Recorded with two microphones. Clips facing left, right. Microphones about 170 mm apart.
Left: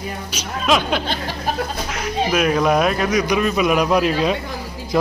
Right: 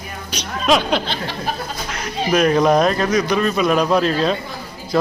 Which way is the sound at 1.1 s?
45° left (ahead or behind).